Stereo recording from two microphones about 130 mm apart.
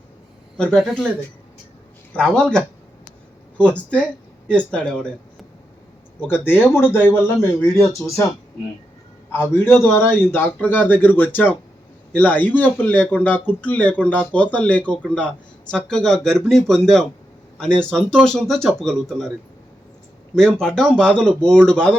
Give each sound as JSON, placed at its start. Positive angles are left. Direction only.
{"t": 0.5, "sound": "speech", "side_deg": 5}
{"t": 2.1, "sound": "speech", "side_deg": 5}
{"t": 3.9, "sound": "speech", "side_deg": 10}
{"t": 9.5, "sound": "speech", "side_deg": 20}
{"t": 20.6, "sound": "speech", "side_deg": 5}